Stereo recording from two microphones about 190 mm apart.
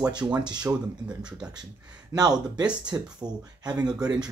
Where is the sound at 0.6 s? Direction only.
5° right (ahead or behind).